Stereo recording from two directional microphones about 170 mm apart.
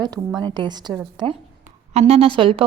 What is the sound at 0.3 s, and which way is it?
Speech, 25° right (ahead or behind).